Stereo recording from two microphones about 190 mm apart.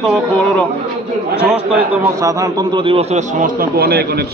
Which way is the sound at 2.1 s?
15° right (ahead or behind).